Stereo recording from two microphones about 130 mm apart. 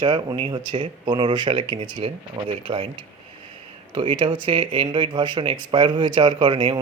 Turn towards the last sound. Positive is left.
turn(degrees=-35)  # may be behind; listen again after turning